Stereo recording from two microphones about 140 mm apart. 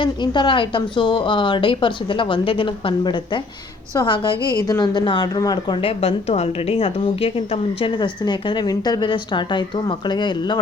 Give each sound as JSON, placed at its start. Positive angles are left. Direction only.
{"t": 0.0, "sound": "a woman's voice", "side_deg": 35}